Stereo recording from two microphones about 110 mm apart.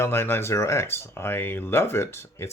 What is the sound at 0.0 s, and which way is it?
Speech, 20° left (ahead or behind).